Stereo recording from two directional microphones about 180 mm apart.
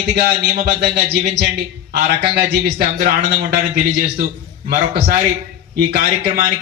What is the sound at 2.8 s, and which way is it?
Speech, 45° right (ahead or behind).